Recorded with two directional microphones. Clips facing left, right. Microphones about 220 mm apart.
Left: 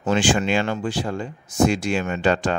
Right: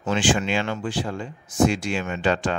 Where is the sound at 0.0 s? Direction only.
40° left (ahead or behind).